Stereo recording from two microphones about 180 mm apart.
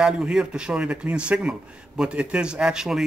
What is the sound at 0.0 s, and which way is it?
Speech, 5° right (ahead or behind).